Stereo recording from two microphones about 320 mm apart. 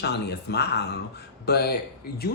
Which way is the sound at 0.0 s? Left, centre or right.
Left.